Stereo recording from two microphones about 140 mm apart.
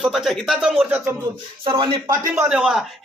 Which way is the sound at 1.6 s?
35° right (ahead or behind).